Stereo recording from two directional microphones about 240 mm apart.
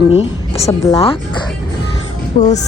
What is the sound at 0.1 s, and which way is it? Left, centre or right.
A woman's voice, left.